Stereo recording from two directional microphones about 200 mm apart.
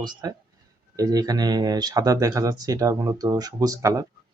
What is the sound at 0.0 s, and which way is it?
Speech, 20° right (ahead or behind).